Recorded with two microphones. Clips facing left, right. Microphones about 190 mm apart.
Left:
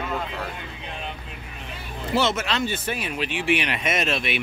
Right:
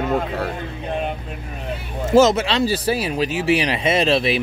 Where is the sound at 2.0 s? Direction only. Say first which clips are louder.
Right 10 dB; 45° right (ahead or behind).